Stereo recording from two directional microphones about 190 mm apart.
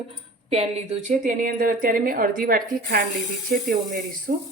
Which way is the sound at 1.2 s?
45° right (ahead or behind).